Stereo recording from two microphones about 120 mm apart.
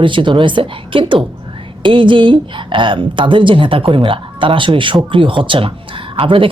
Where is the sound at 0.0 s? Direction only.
45° right (ahead or behind).